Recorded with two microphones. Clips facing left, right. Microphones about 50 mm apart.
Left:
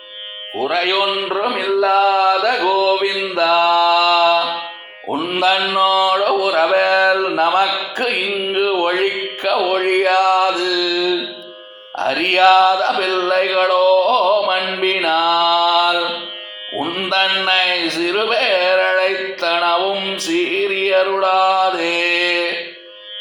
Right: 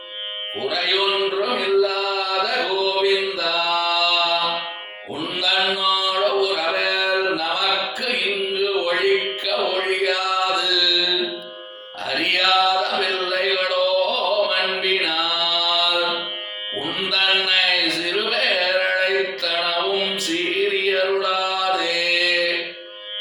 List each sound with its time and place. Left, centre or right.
0.6 s mantra: left
5.0 s mantra: left
6.4 s a sound: left
10.8 s music: left
11.9 s mantra: left
16.8 s music: left
17.4 s a sound: left
19.4 s music: left
21.2 s mantra: left